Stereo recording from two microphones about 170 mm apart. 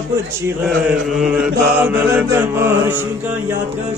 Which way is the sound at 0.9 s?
5° right (ahead or behind).